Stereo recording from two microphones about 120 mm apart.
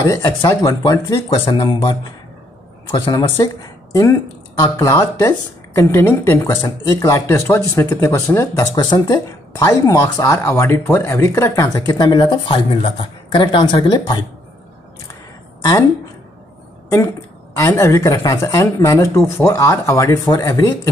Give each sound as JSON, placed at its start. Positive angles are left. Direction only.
{"t": 0.0, "sound": "speech", "side_deg": 30}
{"t": 17.6, "sound": "speech", "side_deg": 25}